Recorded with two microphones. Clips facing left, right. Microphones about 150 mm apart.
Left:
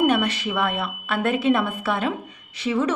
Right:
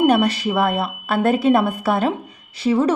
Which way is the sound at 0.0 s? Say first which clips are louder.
Right 4 dB; 35° right (ahead or behind).